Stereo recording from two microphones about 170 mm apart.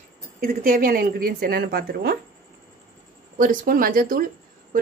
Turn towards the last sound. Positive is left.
turn(degrees=-55)  # may be behind; listen again after turning